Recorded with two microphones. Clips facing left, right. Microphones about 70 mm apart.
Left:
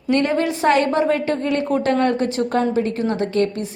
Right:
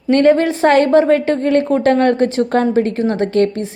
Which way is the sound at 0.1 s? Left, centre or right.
Right.